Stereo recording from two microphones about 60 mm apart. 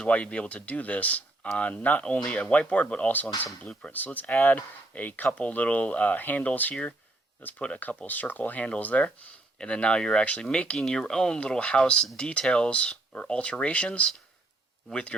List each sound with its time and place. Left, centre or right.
0.0 s speech: centre